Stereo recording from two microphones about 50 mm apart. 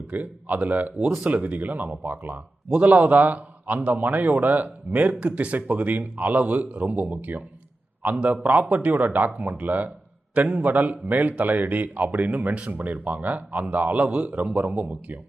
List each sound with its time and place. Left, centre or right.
0.1 s a man's voice: right